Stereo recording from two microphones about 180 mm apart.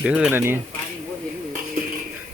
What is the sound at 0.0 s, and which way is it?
Speech, 5° right (ahead or behind).